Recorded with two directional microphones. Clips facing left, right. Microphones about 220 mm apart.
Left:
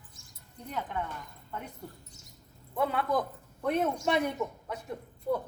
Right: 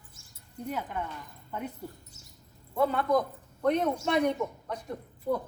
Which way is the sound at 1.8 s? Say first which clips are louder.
Right 3 dB; 5° right (ahead or behind).